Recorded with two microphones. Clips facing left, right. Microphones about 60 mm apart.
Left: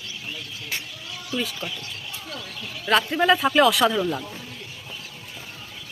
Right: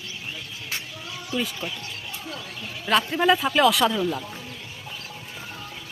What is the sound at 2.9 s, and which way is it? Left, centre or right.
Speech, centre.